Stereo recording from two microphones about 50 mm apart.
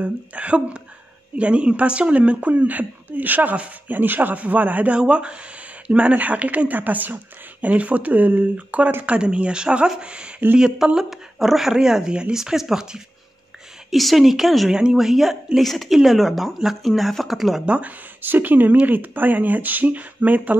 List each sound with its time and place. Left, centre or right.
0.0 s a woman's voice: right
4.9 s a woman's voice: right
8.5 s a woman's voice: right
11.0 s speech: centre
13.8 s speech: centre
14.7 s speech: centre
17.6 s a woman's voice: right
18.2 s speech: right